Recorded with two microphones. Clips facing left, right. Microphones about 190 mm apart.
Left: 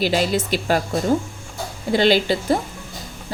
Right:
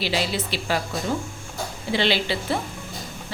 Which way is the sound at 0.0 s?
45° left (ahead or behind).